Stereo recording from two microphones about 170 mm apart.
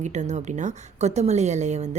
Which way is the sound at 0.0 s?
45° right (ahead or behind).